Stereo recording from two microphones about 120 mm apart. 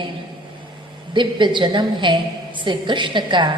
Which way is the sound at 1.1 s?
40° right (ahead or behind).